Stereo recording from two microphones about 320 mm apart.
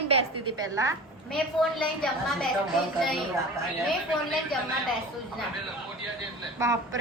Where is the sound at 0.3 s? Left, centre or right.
Centre.